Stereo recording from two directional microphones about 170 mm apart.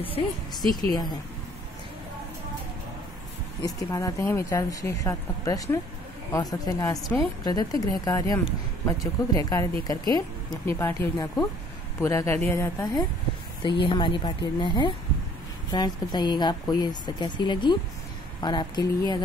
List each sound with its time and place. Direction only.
0.0 s a woman's voice: 30° left (ahead or behind)
3.6 s speech: 20° left (ahead or behind)
13.6 s speech: 30° left (ahead or behind)